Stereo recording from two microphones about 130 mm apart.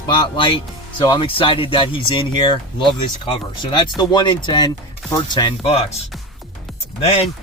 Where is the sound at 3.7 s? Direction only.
35° left (ahead or behind).